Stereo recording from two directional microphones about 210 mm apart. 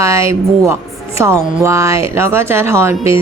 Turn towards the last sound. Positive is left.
turn(degrees=-10)  # may be behind; listen again after turning